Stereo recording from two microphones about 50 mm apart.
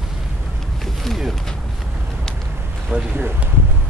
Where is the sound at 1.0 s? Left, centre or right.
Centre.